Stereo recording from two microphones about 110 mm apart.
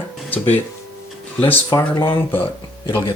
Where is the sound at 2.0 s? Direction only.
50° left (ahead or behind).